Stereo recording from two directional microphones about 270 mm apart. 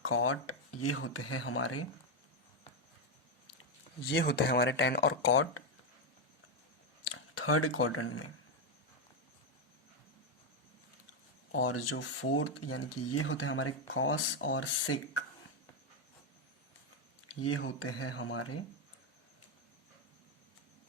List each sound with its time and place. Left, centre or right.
0.0 s speech: left
4.1 s speech: left
7.1 s speech: left
11.5 s speech: left
17.4 s speech: left